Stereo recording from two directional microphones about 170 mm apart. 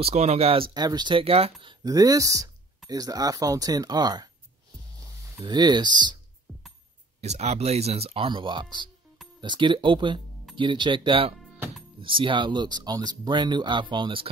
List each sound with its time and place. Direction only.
0.0 s speech: 40° right (ahead or behind); by 4.3 s 25° right (ahead or behind)
5.4 s speech: 25° right (ahead or behind)
7.2 s speech: 40° right (ahead or behind)